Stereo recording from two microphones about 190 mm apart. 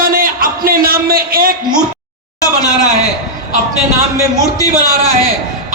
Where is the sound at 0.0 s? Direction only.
50° right (ahead or behind).